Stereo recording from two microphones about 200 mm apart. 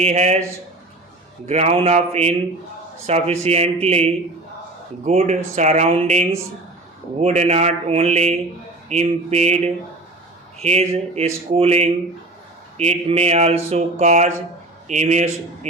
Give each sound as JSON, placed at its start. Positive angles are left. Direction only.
{"t": 0.0, "sound": "speech", "side_deg": -30}
{"t": 1.5, "sound": "speech", "side_deg": -30}
{"t": 10.6, "sound": "speech", "side_deg": -30}